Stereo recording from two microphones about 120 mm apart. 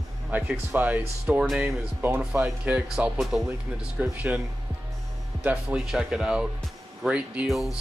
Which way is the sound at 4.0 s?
15° right (ahead or behind).